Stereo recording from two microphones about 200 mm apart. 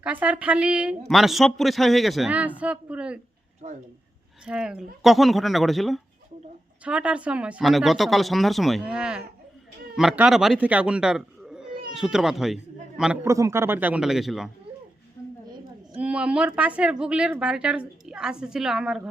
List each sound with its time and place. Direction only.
0.0 s a woman's voice: 5° right (ahead or behind)
3.6 s speech: 35° right (ahead or behind)
4.4 s a woman's voice: 5° right (ahead or behind)
13.2 s a man's voice: 15° right (ahead or behind)
16.0 s a woman's voice: 5° right (ahead or behind)